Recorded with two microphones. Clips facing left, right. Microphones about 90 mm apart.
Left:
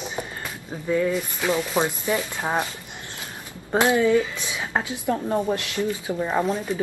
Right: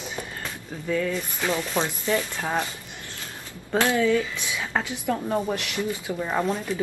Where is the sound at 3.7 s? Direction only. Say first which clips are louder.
Left 3 dB; 20° left (ahead or behind).